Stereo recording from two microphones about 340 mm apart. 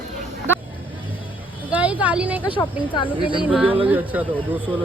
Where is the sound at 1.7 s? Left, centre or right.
Centre.